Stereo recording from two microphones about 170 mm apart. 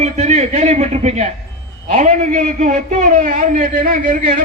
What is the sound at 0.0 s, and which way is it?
A man's voice, 40° right (ahead or behind).